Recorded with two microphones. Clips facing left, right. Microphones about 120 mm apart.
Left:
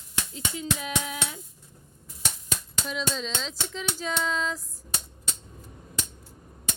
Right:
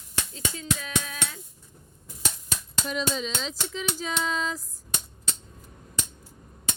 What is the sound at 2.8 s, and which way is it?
Speech, 5° right (ahead or behind).